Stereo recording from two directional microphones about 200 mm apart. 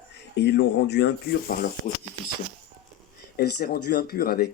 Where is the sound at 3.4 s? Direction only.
50° left (ahead or behind).